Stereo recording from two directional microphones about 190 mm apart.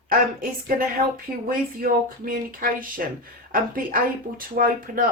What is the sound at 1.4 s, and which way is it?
Speech, 50° right (ahead or behind).